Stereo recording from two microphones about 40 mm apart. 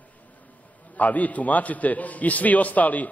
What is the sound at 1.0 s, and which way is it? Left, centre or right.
A man's voice, left.